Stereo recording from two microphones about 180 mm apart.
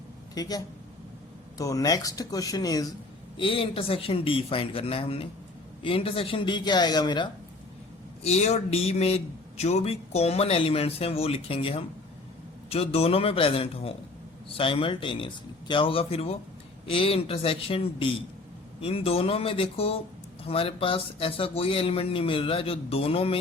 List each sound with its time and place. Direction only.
0.3 s a man's voice: 20° left (ahead or behind)
8.2 s a man's voice: 35° left (ahead or behind)